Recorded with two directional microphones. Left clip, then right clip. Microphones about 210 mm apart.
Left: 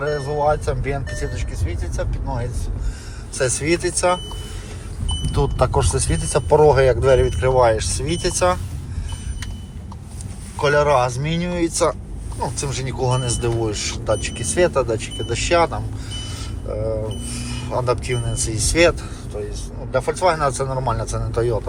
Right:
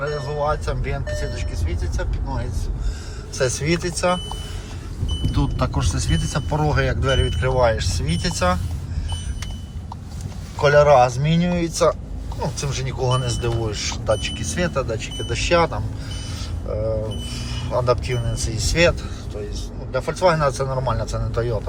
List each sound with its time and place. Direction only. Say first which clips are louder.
0.0 s speech: left 4 dB; 10° right (ahead or behind)
5.2 s speech: left 5 dB; centre (ahead or behind)
10.6 s speech: right 3 dB; 15° right (ahead or behind)